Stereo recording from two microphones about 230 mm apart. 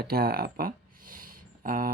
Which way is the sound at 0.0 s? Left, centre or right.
Right.